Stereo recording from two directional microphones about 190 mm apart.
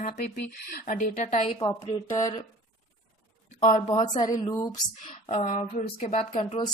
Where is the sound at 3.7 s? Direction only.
40° left (ahead or behind).